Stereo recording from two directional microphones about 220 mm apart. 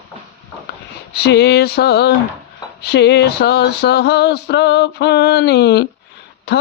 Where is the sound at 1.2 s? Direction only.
50° left (ahead or behind).